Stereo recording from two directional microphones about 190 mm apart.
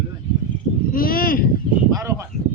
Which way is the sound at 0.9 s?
50° left (ahead or behind).